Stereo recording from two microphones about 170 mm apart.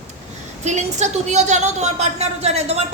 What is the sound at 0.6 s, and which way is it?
A woman's voice, 40° right (ahead or behind).